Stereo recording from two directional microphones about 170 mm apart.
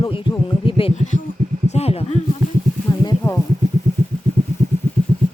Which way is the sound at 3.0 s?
25° left (ahead or behind).